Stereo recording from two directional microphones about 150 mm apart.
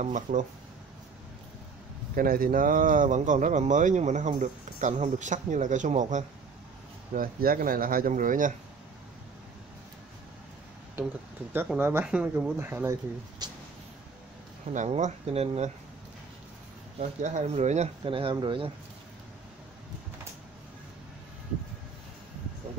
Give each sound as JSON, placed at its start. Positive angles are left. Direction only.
{"t": 0.0, "sound": "speech", "side_deg": -60}
{"t": 2.1, "sound": "speech", "side_deg": -75}
{"t": 7.2, "sound": "speech", "side_deg": -75}
{"t": 11.8, "sound": "speech", "side_deg": -15}
{"t": 13.4, "sound": "speech", "side_deg": -30}
{"t": 14.7, "sound": "speech", "side_deg": -55}
{"t": 17.2, "sound": "speech", "side_deg": -50}